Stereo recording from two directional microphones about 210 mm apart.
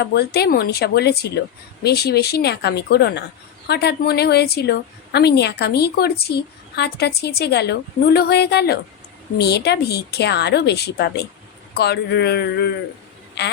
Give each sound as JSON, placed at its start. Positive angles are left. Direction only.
{"t": 0.0, "sound": "a woman's voice", "side_deg": 50}